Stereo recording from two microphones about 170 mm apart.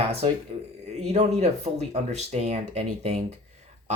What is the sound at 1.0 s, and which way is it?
Speech, 40° right (ahead or behind).